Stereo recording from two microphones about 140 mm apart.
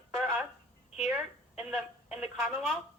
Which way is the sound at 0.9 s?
5° right (ahead or behind).